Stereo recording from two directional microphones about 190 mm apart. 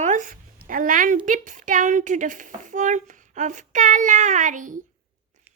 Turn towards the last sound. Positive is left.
turn(degrees=-40)  # may be behind; listen again after turning